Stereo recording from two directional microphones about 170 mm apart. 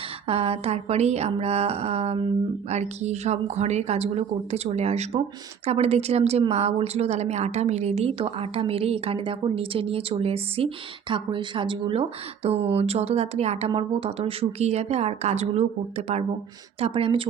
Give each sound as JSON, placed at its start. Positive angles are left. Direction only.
{"t": 0.3, "sound": "a woman's voice", "side_deg": -35}